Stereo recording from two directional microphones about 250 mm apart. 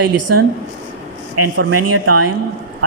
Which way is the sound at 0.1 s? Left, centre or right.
Right.